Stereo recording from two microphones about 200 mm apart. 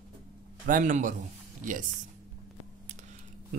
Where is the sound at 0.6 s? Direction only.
40° right (ahead or behind).